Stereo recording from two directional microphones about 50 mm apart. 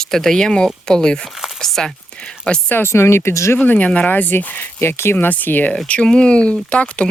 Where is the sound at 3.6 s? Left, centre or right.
Left.